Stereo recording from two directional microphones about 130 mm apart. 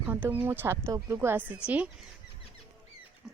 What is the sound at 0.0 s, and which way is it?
Speech, 15° right (ahead or behind).